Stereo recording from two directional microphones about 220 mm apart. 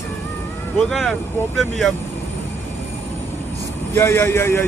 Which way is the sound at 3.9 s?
10° left (ahead or behind).